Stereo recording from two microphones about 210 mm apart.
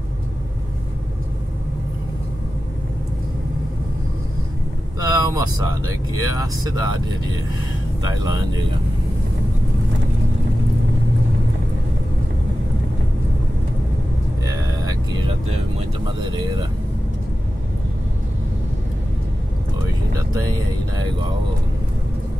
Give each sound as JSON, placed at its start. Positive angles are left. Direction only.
{"t": 5.0, "sound": "vehicle", "side_deg": -15}
{"t": 6.1, "sound": "speech", "side_deg": -15}
{"t": 14.4, "sound": "vehicle", "side_deg": -20}
{"t": 16.2, "sound": "speech", "side_deg": -20}
{"t": 20.9, "sound": "speech", "side_deg": -20}